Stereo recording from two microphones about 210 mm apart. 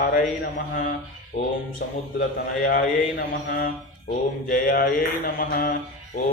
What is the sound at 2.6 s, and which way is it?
Mantra, 40° left (ahead or behind).